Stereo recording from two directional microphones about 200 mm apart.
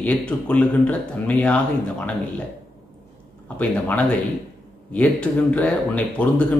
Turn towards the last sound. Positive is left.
turn(degrees=5)  # may be behind; listen again after turning